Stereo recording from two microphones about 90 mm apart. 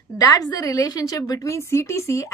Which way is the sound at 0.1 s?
45° left (ahead or behind).